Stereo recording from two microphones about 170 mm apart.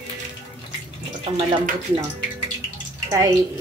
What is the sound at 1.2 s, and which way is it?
Speech, 35° right (ahead or behind).